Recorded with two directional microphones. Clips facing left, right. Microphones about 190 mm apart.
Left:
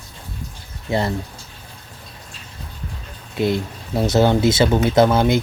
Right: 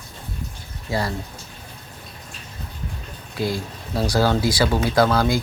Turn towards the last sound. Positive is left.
turn(degrees=20)  # may be behind; listen again after turning